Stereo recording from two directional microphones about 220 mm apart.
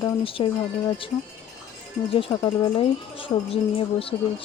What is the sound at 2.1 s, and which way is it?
Speech, 20° left (ahead or behind).